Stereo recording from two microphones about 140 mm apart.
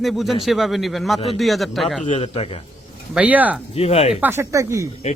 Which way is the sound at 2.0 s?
45° left (ahead or behind).